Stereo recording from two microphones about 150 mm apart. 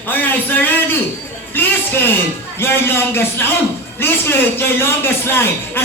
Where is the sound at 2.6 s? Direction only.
15° left (ahead or behind).